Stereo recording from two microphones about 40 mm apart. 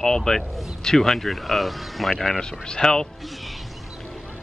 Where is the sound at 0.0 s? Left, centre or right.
Centre.